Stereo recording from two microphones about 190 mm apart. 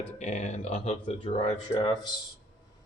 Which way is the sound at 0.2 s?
35° left (ahead or behind).